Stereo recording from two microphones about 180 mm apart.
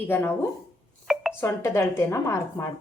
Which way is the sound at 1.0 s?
Centre (ahead or behind).